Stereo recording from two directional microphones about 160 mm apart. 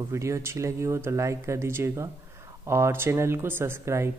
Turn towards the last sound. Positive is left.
turn(degrees=-15)  # may be behind; listen again after turning